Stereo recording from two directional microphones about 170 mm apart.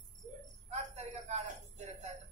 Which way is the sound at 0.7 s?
40° right (ahead or behind).